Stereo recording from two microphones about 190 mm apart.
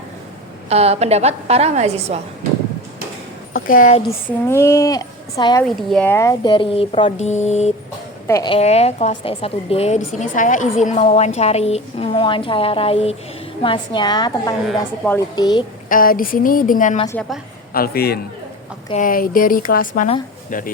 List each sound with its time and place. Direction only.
0.7 s a woman's voice: 35° right (ahead or behind)
4.0 s a woman's voice: 10° left (ahead or behind)
5.6 s speech: 5° left (ahead or behind); by 7.7 s 35° left (ahead or behind)
8.3 s a woman's voice: 20° left (ahead or behind)
8.5 s a woman's voice: 35° left (ahead or behind)
14.7 s a woman's voice: 5° left (ahead or behind)
15.4 s speech: 20° left (ahead or behind)
15.9 s a man's voice: 45° left (ahead or behind)
18.9 s speech: 45° left (ahead or behind)